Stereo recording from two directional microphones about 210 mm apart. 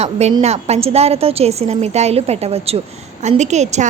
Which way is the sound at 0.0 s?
30° right (ahead or behind).